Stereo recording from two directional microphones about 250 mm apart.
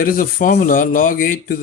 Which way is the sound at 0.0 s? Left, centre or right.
Left.